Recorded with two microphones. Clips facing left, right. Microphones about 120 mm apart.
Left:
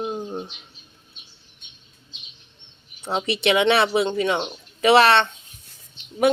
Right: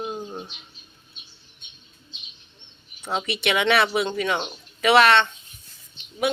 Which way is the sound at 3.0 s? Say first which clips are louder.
Left 4 dB; 30° left (ahead or behind).